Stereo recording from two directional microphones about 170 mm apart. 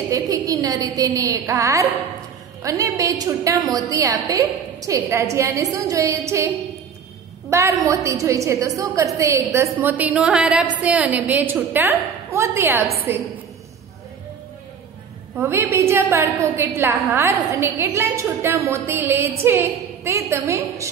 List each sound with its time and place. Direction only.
0.1 s a woman's voice: 20° right (ahead or behind)
15.3 s a woman's voice: 15° right (ahead or behind)